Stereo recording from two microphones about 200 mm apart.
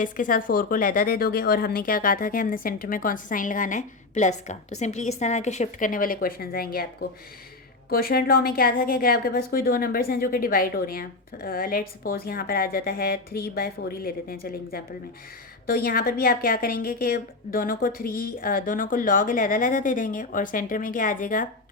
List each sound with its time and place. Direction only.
0.0 s a woman's voice: 45° left (ahead or behind)
7.9 s a woman's voice: 45° left (ahead or behind)